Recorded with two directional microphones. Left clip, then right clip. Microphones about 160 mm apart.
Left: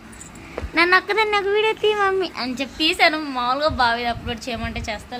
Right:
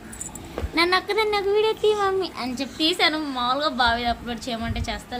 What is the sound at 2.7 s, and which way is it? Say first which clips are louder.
A woman's voice: left 4 dB; 15° left (ahead or behind).